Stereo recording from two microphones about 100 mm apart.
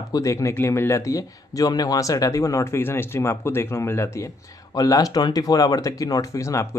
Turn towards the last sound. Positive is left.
turn(degrees=30)  # may be behind; listen again after turning